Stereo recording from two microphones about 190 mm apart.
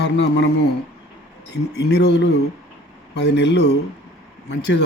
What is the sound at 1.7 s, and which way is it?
A man's voice, 60° left (ahead or behind).